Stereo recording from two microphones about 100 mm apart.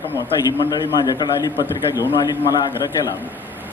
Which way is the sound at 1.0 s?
40° left (ahead or behind).